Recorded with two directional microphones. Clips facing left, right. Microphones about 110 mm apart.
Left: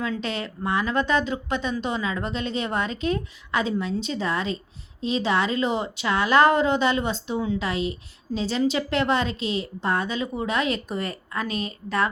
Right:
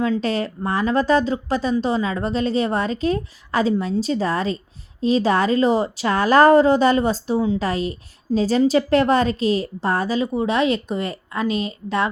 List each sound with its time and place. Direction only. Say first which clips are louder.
0.0 s a woman's voice: right 7 dB; 35° right (ahead or behind)